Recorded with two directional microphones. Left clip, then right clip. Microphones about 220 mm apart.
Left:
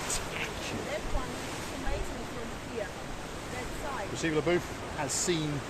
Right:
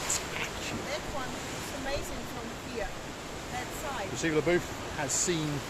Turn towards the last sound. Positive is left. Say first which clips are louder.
# even
turn(degrees=0)  # may be behind; listen again after turning